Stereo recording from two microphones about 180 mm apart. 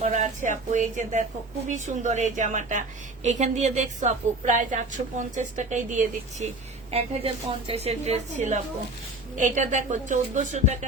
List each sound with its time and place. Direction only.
0.0 s a woman's voice: 40° right (ahead or behind)
6.9 s a woman's voice: 35° right (ahead or behind)